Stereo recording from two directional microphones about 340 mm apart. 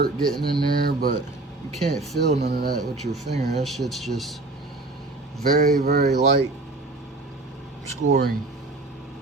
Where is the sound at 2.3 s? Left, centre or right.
Right.